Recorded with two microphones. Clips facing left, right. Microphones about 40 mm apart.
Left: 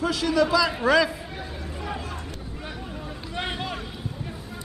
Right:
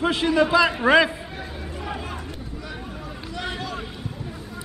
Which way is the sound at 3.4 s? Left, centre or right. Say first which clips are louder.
Left 1 dB; left.